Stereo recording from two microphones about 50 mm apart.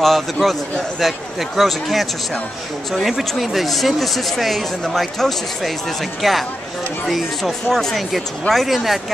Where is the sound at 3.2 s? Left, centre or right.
Centre.